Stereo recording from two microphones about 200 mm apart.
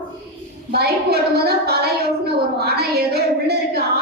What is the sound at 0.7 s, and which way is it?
A woman's voice, 50° right (ahead or behind).